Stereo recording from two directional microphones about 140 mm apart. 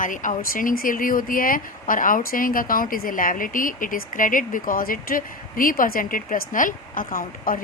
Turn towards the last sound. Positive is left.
turn(degrees=85)